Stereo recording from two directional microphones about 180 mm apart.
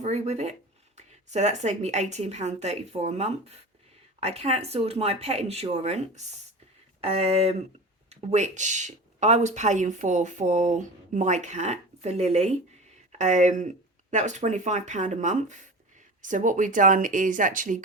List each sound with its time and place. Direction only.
0.0 s speech: 40° right (ahead or behind)